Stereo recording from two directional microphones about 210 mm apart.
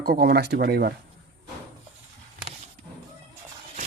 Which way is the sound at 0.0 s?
45° right (ahead or behind).